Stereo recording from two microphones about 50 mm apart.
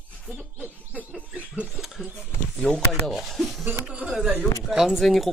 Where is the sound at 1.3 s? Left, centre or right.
Right.